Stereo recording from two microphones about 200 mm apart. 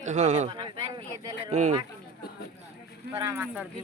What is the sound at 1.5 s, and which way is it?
Speech, 35° right (ahead or behind).